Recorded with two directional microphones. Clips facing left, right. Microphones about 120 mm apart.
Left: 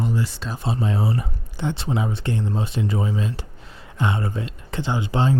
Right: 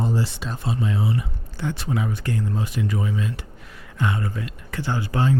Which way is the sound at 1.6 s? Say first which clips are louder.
Left 1 dB; 25° left (ahead or behind).